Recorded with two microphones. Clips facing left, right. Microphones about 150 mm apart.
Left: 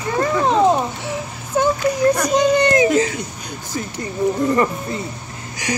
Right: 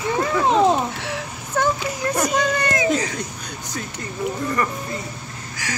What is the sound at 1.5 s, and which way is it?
Whimper, 15° left (ahead or behind).